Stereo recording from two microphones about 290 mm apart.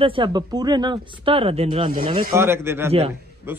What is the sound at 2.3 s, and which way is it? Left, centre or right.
Speech, centre.